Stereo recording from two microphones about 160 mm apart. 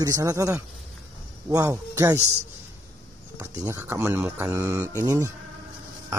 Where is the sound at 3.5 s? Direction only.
15° right (ahead or behind).